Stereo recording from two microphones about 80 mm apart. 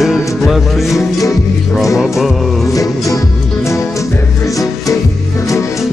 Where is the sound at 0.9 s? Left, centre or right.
Left.